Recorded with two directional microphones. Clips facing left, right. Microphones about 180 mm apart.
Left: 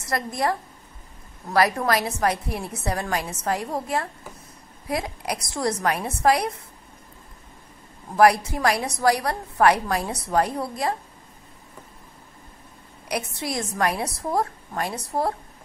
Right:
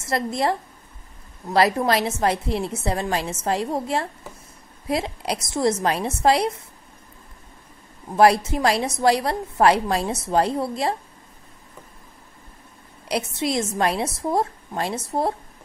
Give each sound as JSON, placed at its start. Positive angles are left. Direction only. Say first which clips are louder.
{"t": 0.0, "sound": "a woman's voice", "louder": "right 2 dB", "side_deg": -25}
{"t": 8.2, "sound": "a woman's voice", "louder": "right 1 dB", "side_deg": -25}
{"t": 13.1, "sound": "a woman's voice", "louder": "right 4 dB", "side_deg": -25}